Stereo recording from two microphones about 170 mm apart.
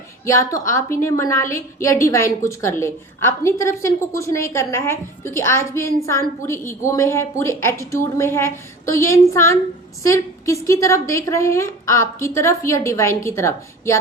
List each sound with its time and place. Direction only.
0.3 s a woman's voice: 20° left (ahead or behind)